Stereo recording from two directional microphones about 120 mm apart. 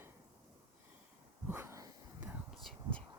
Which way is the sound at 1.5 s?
20° right (ahead or behind).